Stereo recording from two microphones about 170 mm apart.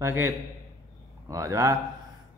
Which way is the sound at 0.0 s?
15° right (ahead or behind).